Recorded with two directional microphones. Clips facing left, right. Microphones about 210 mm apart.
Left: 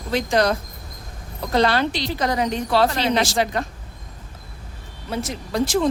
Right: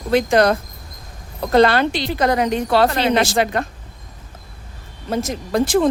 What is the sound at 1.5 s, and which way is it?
A woman's voice, 55° right (ahead or behind).